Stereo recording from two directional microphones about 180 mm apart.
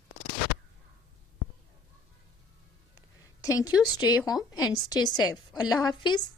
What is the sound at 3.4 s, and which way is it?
A woman's voice, 20° left (ahead or behind).